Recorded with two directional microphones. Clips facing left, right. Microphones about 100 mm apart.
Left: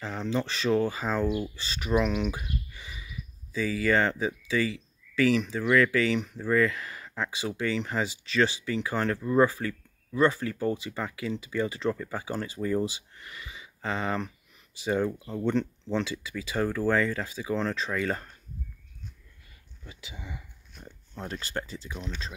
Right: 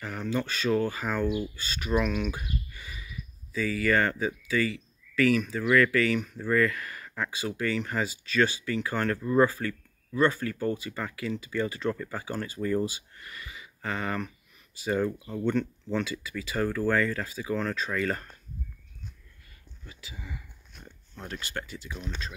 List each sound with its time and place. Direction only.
0.0 s speech: 25° left (ahead or behind)
11.9 s speech: 10° left (ahead or behind)
15.5 s speech: 25° left (ahead or behind)
16.6 s speech: 10° left (ahead or behind)
19.9 s speech: 20° left (ahead or behind)